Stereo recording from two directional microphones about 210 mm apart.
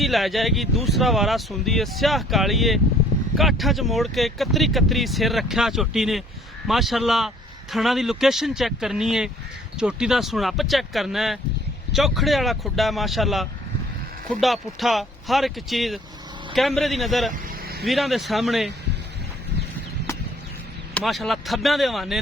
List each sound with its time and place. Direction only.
0.0 s speech: centre (ahead or behind)
17.3 s vehicle: 45° right (ahead or behind)
17.8 s speech: centre (ahead or behind)
20.9 s speech: centre (ahead or behind)